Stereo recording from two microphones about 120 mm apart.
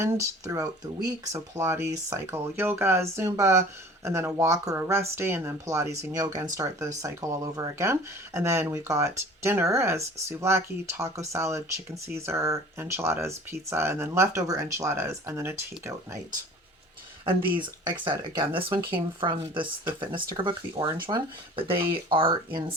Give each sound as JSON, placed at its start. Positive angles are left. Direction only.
{"t": 0.0, "sound": "speech", "side_deg": -25}
{"t": 17.2, "sound": "speech", "side_deg": -45}